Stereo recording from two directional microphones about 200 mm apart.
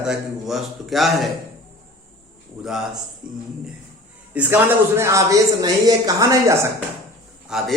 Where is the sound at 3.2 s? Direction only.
5° right (ahead or behind).